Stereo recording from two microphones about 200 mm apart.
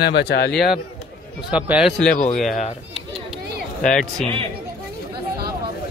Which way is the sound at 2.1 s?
40° left (ahead or behind).